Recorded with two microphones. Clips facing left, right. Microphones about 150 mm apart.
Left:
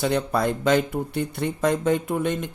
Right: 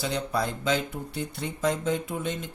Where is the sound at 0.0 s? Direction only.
55° left (ahead or behind).